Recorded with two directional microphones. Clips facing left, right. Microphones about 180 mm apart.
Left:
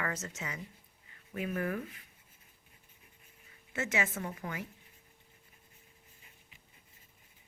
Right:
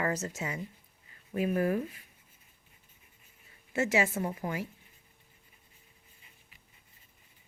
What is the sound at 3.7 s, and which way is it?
Speech, 30° right (ahead or behind).